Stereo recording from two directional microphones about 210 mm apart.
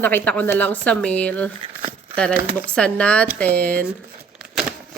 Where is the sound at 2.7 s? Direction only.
5° left (ahead or behind).